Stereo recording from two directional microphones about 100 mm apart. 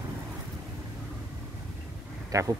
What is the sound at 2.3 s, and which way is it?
Speech, 35° right (ahead or behind).